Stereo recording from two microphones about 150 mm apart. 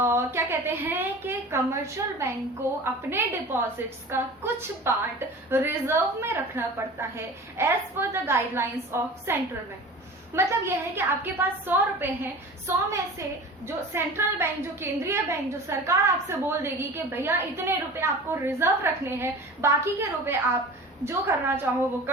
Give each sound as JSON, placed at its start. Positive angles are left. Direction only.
{"t": 0.0, "sound": "a woman's voice", "side_deg": -20}
{"t": 10.3, "sound": "a woman's voice", "side_deg": -15}